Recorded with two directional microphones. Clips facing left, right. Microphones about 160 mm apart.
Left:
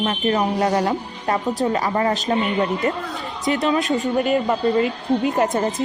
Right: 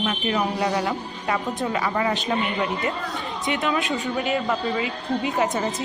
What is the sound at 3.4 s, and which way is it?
A woman's voice, 40° left (ahead or behind).